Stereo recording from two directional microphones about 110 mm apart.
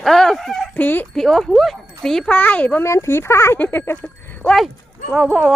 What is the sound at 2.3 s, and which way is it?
A child's voice, 15° left (ahead or behind).